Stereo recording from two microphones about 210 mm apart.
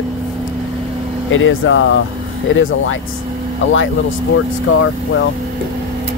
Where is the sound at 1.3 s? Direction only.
70° left (ahead or behind).